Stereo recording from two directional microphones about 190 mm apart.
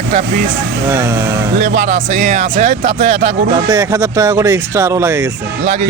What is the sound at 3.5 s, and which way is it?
Speech, 20° right (ahead or behind).